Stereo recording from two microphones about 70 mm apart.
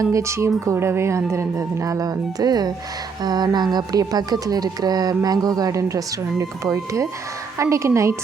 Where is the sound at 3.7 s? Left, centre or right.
Right.